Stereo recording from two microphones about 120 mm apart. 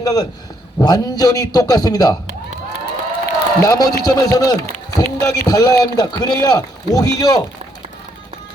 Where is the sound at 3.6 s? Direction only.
30° left (ahead or behind).